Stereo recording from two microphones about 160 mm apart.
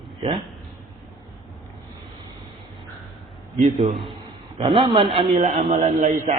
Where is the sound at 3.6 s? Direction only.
50° right (ahead or behind).